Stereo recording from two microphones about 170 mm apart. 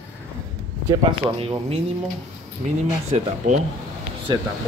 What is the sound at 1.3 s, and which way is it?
Speech, 35° right (ahead or behind).